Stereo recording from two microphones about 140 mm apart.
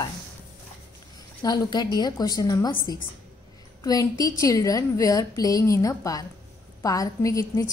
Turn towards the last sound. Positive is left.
turn(degrees=25)  # may be behind; listen again after turning